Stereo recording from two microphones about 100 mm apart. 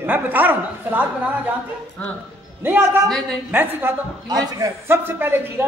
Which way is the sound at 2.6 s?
20° right (ahead or behind).